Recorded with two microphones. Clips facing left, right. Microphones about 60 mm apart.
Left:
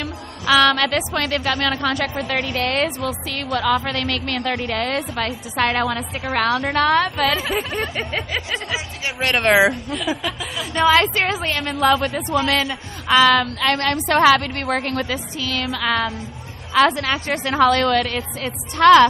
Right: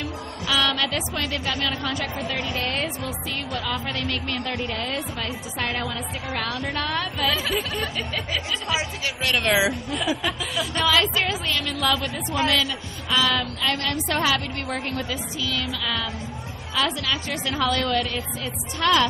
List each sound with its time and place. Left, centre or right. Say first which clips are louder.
0.0 s a woman's voice: left 4 dB; left
7.4 s speech: left 3 dB; left
10.4 s speech: left 10 dB; left
11.1 s speech: left 4 dB; left
12.0 s a woman's voice: left 6 dB; left
12.4 s speech: left 3 dB; left
13.1 s a woman's voice: left 8 dB; left
17.5 s a woman's voice: left 8 dB; left